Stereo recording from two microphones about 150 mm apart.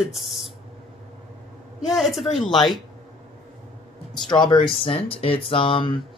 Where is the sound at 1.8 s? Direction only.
Centre (ahead or behind).